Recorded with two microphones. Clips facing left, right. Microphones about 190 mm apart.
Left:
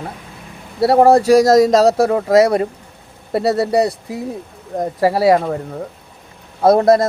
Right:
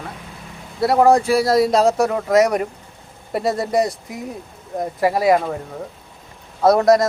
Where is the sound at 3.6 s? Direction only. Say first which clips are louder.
Left 3 dB; 35° left (ahead or behind).